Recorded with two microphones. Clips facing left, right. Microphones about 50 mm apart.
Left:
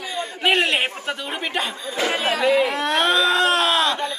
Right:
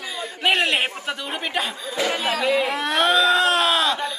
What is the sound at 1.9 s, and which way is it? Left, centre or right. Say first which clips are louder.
Speech: left 1 dB; left.